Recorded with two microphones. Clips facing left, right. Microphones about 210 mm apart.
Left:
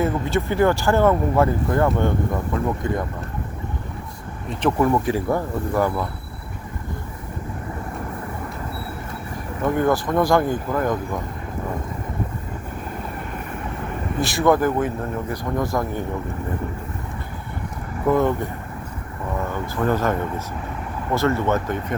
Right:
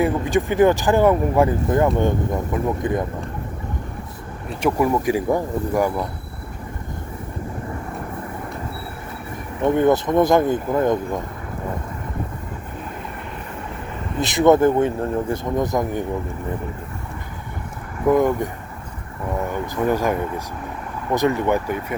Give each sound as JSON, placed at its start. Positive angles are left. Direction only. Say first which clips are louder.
{"t": 0.0, "sound": "speech", "louder": "right 2 dB", "side_deg": -15}
{"t": 4.6, "sound": "speech", "louder": "even", "side_deg": -10}
{"t": 9.6, "sound": "speech", "louder": "right 3 dB", "side_deg": -20}
{"t": 14.2, "sound": "speech", "louder": "right 4 dB", "side_deg": -20}
{"t": 18.1, "sound": "speech", "louder": "right 2 dB", "side_deg": -15}
{"t": 19.5, "sound": "speech", "louder": "right 1 dB", "side_deg": -15}
{"t": 21.2, "sound": "speech", "louder": "right 1 dB", "side_deg": -15}